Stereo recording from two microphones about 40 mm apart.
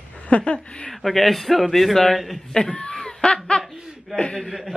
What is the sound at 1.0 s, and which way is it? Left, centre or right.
Music, centre.